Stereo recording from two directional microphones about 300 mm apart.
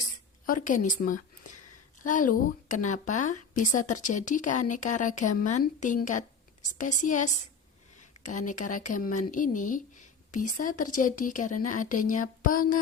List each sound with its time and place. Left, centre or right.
0.4 s a woman's voice: left